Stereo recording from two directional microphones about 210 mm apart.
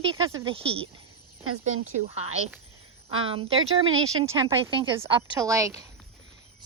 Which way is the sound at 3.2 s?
25° right (ahead or behind).